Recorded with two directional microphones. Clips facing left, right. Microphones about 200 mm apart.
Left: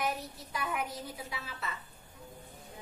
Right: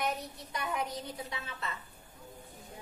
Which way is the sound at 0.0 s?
5° left (ahead or behind).